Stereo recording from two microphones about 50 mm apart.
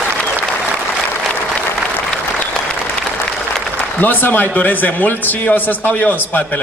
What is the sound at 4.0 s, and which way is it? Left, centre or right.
A man's voice, left.